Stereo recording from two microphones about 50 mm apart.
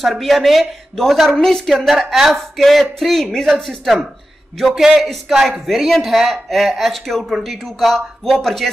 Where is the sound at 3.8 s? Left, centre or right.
Centre.